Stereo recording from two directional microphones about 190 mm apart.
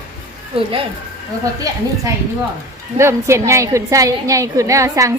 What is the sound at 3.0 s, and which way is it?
A woman's voice, 15° right (ahead or behind).